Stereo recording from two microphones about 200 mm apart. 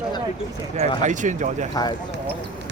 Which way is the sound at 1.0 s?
40° right (ahead or behind).